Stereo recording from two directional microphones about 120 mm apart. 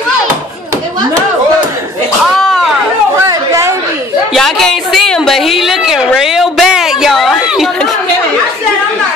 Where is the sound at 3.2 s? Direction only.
25° right (ahead or behind).